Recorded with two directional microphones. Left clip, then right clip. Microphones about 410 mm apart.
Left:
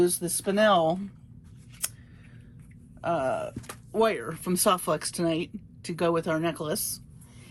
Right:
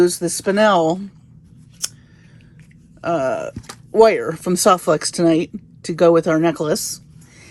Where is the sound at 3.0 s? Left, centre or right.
Centre.